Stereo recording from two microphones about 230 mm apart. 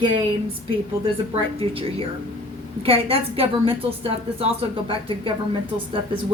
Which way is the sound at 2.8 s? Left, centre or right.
Right.